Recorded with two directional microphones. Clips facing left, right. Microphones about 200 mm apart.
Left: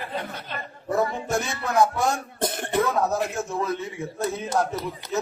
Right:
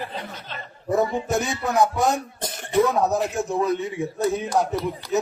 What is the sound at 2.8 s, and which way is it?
Music, 15° right (ahead or behind).